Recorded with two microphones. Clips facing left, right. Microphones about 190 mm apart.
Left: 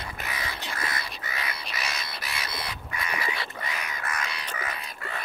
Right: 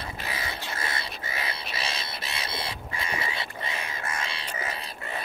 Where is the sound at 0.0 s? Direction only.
25° right (ahead or behind).